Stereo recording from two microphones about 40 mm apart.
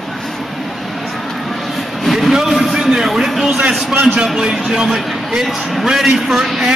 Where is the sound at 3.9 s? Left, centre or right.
Right.